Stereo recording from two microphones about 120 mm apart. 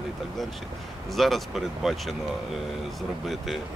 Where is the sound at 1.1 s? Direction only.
Centre (ahead or behind).